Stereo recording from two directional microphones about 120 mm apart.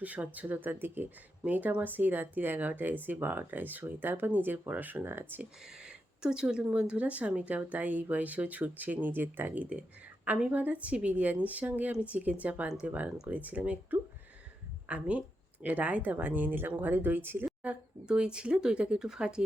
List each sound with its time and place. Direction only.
0.0 s speech: 10° right (ahead or behind)
5.6 s speech: 5° right (ahead or behind)